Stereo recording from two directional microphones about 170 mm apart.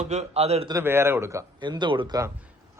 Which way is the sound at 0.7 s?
15° right (ahead or behind).